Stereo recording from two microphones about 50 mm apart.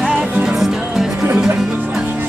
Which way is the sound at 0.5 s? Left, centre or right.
Centre.